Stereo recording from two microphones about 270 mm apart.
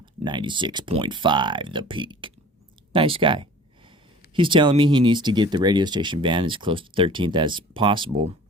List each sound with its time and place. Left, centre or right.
0.0 s speech: centre
2.9 s a sound: centre
4.4 s speech: centre